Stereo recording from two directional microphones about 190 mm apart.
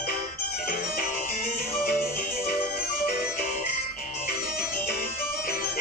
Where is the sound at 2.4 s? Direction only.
50° left (ahead or behind).